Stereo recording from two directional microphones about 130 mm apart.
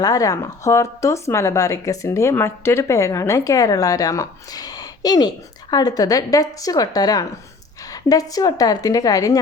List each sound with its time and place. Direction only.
0.0 s speech: 25° left (ahead or behind)